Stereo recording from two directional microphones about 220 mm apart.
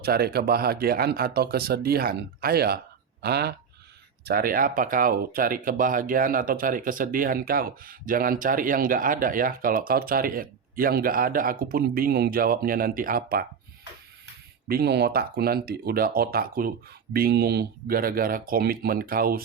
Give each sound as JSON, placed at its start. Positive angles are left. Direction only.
{"t": 0.0, "sound": "speech", "side_deg": -45}
{"t": 14.7, "sound": "speech", "side_deg": -45}